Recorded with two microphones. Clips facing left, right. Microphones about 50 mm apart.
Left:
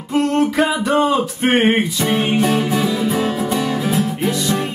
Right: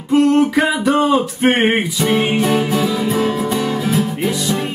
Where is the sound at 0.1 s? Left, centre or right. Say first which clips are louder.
Right 4 dB; centre.